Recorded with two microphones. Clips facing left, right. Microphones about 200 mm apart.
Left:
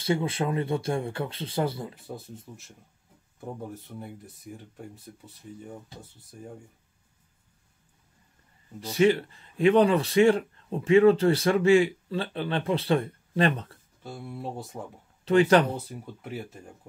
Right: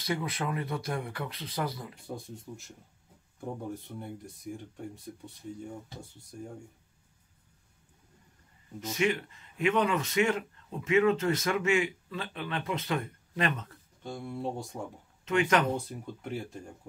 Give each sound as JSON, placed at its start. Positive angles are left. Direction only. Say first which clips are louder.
{"t": 0.0, "sound": "speech", "louder": "left 6 dB", "side_deg": 25}
{"t": 2.0, "sound": "speech", "louder": "even", "side_deg": 5}
{"t": 4.0, "sound": "speech", "louder": "right 1 dB", "side_deg": 5}
{"t": 8.8, "sound": "speech", "louder": "left 7 dB", "side_deg": 35}
{"t": 14.0, "sound": "speech", "louder": "right 1 dB", "side_deg": 5}
{"t": 15.2, "sound": "speech", "louder": "left 7 dB", "side_deg": 35}
{"t": 15.7, "sound": "speech", "louder": "right 1 dB", "side_deg": 5}